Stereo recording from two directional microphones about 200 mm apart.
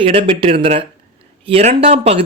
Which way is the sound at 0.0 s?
25° right (ahead or behind).